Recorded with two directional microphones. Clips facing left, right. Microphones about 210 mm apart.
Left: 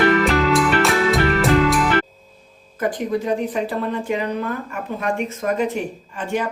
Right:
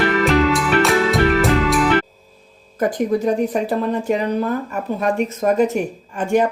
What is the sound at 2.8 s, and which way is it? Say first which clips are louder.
Speech: right 4 dB; 40° right (ahead or behind).